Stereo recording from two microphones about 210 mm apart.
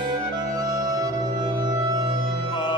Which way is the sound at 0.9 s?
15° right (ahead or behind).